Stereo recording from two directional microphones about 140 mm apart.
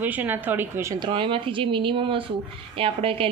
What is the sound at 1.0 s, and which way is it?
A woman's voice, 35° right (ahead or behind).